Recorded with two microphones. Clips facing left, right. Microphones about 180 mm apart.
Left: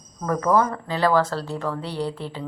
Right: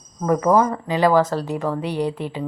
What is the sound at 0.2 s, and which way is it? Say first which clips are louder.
Speech: right 4 dB; 15° right (ahead or behind).